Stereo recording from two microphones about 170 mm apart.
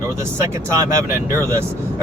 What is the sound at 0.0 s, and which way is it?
Speech, 15° right (ahead or behind).